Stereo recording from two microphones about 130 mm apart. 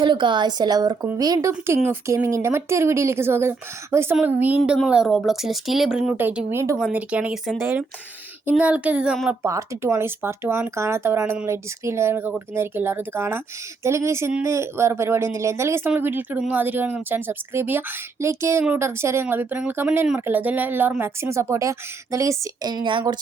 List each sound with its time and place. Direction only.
0.0 s a woman's voice: 35° right (ahead or behind); by 6.7 s 20° right (ahead or behind)
6.7 s speech: 5° right (ahead or behind)
9.4 s speech: 25° right (ahead or behind)